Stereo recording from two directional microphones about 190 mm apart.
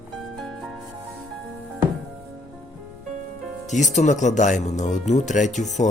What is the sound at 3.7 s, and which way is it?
Speech, 40° left (ahead or behind).